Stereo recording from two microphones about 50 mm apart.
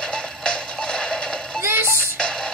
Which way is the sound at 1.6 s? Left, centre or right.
Right.